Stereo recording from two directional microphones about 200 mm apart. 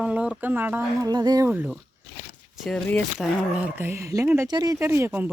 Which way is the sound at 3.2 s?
5° right (ahead or behind).